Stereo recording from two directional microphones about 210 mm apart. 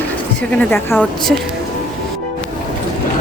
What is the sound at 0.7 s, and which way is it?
Speech, 10° left (ahead or behind).